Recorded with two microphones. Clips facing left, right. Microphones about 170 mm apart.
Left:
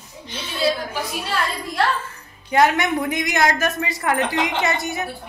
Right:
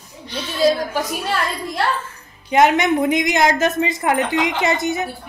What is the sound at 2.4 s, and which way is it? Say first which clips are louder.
A woman's voice: right 3 dB; 20° right (ahead or behind).